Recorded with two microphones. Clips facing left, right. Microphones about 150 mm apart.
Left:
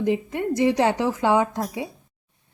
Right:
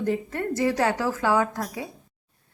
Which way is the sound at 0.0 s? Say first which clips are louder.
Left 3 dB; 15° left (ahead or behind).